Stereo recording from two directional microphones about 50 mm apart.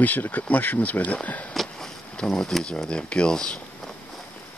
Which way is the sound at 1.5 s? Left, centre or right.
Centre.